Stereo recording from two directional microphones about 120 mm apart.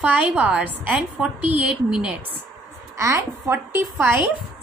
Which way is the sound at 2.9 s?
25° right (ahead or behind).